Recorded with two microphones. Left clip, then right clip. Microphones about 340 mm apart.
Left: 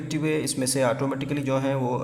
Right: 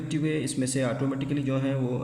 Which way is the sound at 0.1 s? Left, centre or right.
Centre.